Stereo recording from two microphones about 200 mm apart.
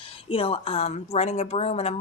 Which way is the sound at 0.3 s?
30° left (ahead or behind).